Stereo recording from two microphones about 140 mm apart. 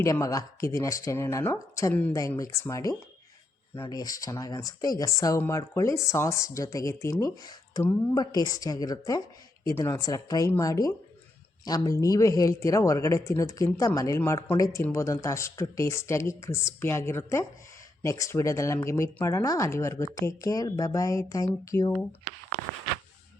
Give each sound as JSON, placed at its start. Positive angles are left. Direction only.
{"t": 0.0, "sound": "speech", "side_deg": 25}
{"t": 2.1, "sound": "speech", "side_deg": 25}